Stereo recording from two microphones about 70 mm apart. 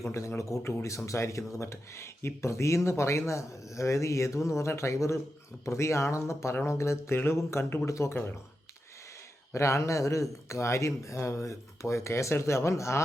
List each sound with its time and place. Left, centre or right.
0.0 s speech: left
9.5 s speech: left